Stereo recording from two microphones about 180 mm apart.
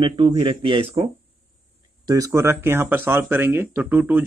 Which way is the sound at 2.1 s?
20° right (ahead or behind).